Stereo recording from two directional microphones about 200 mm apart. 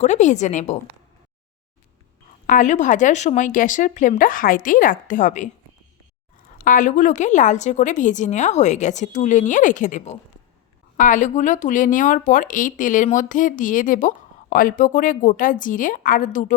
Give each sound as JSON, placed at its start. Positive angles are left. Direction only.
{"t": 0.0, "sound": "speech", "side_deg": 35}
{"t": 2.5, "sound": "speech", "side_deg": 40}
{"t": 6.7, "sound": "speech", "side_deg": 40}